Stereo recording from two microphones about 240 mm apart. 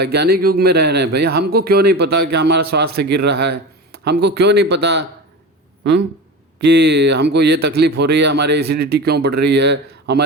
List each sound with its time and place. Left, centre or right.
0.0 s speech: right
6.6 s speech: right